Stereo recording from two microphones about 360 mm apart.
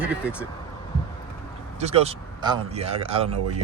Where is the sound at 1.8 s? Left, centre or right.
Centre.